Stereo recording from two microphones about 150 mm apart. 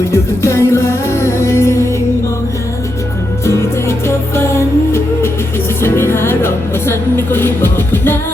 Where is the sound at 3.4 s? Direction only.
20° left (ahead or behind).